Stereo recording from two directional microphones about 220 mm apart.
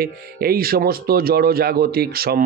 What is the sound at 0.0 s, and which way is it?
Speech, 45° right (ahead or behind).